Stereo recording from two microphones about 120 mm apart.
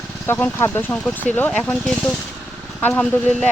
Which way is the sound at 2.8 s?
15° left (ahead or behind).